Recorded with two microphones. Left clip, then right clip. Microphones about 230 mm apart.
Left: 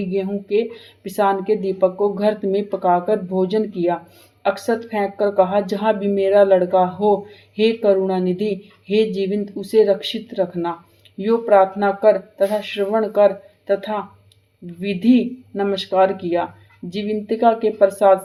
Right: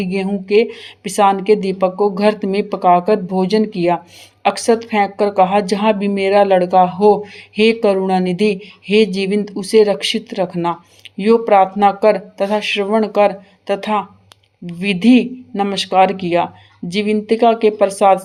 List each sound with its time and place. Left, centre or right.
0.1 s a woman's voice: right
14.8 s a woman's voice: right